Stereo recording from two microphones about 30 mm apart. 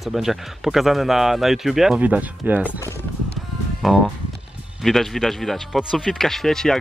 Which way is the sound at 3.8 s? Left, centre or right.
Centre.